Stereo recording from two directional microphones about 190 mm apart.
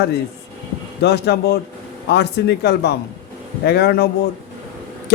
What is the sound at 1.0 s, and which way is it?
Speech, 60° left (ahead or behind).